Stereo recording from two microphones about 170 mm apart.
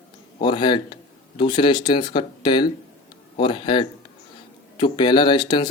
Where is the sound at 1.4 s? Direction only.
25° left (ahead or behind).